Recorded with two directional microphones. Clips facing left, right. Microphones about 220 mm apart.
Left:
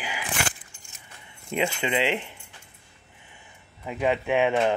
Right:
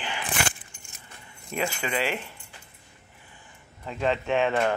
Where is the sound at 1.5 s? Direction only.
20° left (ahead or behind).